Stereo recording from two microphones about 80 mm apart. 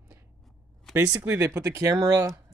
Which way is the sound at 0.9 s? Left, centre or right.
Right.